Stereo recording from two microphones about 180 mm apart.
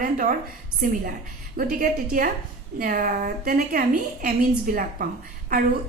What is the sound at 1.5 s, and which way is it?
A woman's voice, 50° right (ahead or behind).